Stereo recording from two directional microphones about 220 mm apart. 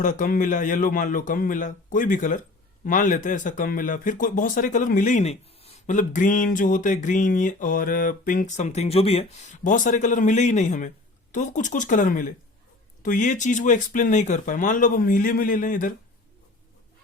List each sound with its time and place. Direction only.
0.0 s speech: 35° left (ahead or behind)